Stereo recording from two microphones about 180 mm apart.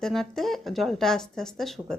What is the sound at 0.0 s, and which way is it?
Speech, centre (ahead or behind).